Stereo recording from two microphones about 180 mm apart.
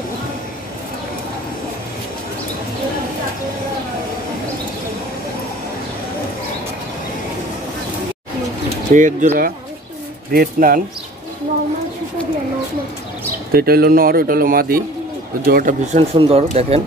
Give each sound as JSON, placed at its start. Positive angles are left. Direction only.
{"t": 8.9, "sound": "speech", "side_deg": -45}
{"t": 10.3, "sound": "speech", "side_deg": -55}
{"t": 13.5, "sound": "speech", "side_deg": -55}